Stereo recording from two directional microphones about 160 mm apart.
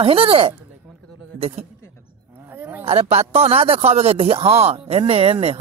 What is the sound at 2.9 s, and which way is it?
Speech, 40° right (ahead or behind).